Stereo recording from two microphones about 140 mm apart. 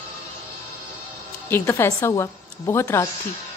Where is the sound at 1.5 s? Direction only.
15° left (ahead or behind).